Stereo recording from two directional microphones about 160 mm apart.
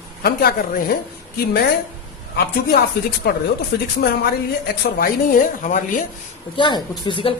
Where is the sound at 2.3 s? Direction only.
75° left (ahead or behind).